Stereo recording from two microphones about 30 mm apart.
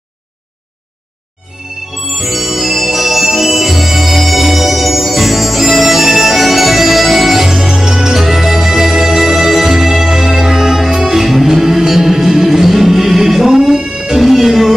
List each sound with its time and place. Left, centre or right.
2.0 s music: centre
7.4 s music: centre
13.6 s music: centre
14.1 s music: centre